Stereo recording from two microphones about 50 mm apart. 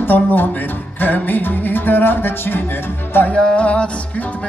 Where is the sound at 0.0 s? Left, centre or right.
Left.